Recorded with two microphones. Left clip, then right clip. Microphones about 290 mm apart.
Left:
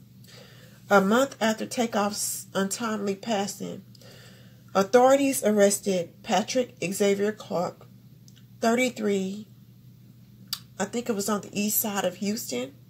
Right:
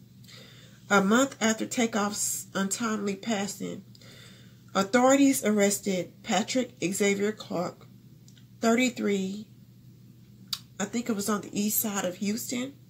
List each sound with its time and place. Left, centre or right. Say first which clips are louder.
0.8 s a woman's voice: left 3 dB; left
4.7 s a woman's voice: left 3 dB; left
10.5 s a woman's voice: left 3 dB; left